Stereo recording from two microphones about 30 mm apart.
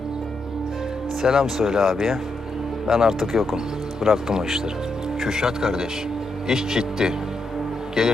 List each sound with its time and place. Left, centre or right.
1.2 s speech: centre